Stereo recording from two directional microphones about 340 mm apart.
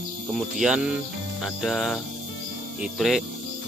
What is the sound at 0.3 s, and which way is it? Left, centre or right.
Speech, centre.